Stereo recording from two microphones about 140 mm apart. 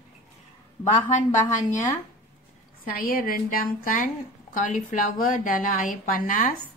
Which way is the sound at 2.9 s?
90° left.